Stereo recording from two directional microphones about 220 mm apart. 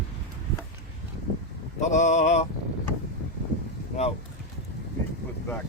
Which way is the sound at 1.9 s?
35° left (ahead or behind).